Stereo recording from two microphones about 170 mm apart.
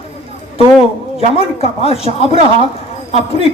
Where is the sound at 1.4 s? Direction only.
35° left (ahead or behind).